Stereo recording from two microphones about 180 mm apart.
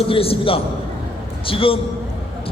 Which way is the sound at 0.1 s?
30° left (ahead or behind).